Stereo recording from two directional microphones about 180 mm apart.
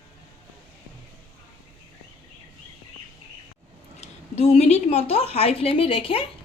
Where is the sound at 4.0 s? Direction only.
35° left (ahead or behind).